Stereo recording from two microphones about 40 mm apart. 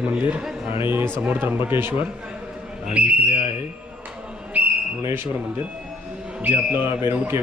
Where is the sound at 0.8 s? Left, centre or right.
Right.